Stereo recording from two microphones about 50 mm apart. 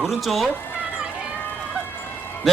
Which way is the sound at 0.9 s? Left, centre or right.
Centre.